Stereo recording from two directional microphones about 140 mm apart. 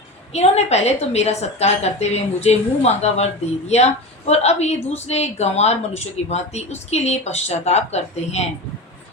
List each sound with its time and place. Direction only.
0.3 s speech: 50° left (ahead or behind)